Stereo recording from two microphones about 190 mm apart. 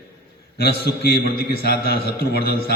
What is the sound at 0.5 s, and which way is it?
A man's voice, 55° left (ahead or behind).